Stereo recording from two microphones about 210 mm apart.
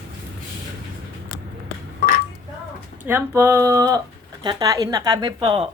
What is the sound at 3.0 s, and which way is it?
Speech, 10° right (ahead or behind).